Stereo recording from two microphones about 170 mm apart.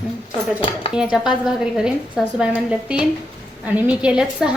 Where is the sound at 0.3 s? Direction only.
35° left (ahead or behind).